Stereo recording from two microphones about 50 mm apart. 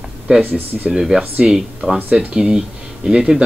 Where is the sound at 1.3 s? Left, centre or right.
Centre.